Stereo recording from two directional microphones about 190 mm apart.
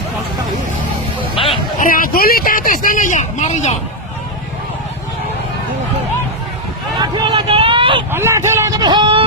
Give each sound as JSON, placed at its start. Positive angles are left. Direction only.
{"t": 1.8, "sound": "vehicle", "side_deg": 45}
{"t": 7.0, "sound": "vehicle", "side_deg": -25}
{"t": 8.1, "sound": "vehicle", "side_deg": -15}